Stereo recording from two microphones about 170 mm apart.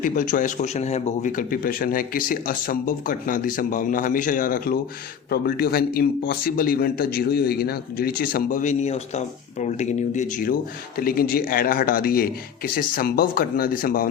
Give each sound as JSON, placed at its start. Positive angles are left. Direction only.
{"t": 0.0, "sound": "speech", "side_deg": 50}
{"t": 1.4, "sound": "a man's voice", "side_deg": 55}